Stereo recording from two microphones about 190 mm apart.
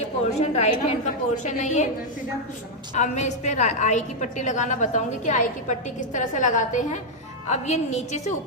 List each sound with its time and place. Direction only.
0.3 s a woman's voice: 35° left (ahead or behind)
2.9 s a woman's voice: 40° left (ahead or behind)